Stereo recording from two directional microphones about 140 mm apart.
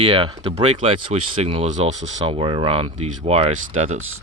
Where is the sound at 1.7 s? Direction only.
55° right (ahead or behind).